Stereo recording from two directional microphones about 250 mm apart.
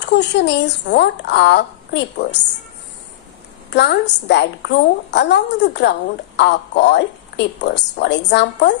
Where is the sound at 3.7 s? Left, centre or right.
Left.